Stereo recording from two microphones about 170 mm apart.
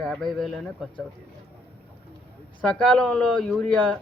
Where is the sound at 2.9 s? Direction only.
5° left (ahead or behind).